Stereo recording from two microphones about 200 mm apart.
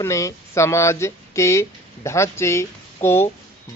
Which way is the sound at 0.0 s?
15° left (ahead or behind).